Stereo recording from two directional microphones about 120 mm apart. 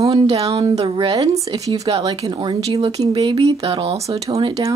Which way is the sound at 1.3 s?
30° right (ahead or behind).